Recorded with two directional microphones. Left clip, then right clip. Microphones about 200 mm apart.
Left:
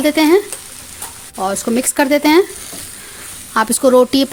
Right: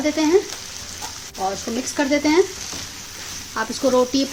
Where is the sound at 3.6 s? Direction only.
60° left (ahead or behind).